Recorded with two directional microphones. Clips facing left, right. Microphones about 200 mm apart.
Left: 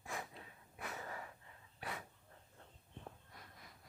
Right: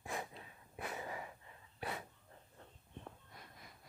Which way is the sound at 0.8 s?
15° right (ahead or behind).